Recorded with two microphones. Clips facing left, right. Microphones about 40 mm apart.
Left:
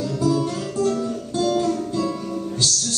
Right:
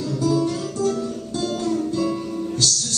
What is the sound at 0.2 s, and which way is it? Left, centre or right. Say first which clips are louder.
Guitar: right 1 dB; left.